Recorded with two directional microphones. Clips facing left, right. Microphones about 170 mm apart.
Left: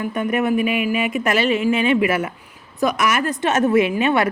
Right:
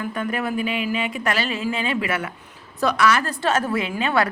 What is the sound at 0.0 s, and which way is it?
A woman's voice, 20° left (ahead or behind).